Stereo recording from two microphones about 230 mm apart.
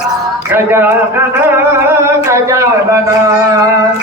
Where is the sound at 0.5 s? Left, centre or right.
Centre.